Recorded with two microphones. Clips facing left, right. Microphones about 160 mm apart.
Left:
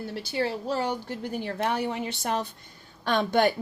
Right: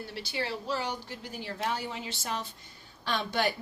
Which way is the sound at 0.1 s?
45° left (ahead or behind).